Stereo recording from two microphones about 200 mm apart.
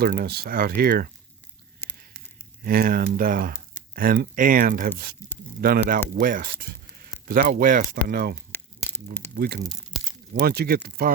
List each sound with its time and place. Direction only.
0.0 s speech: 45° right (ahead or behind)
1.8 s a sound: 10° left (ahead or behind)
2.6 s speech: 45° right (ahead or behind)